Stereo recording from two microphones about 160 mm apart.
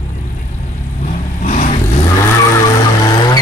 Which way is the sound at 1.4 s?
50° left (ahead or behind).